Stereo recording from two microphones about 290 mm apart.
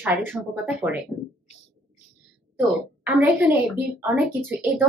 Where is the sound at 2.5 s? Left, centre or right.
Centre.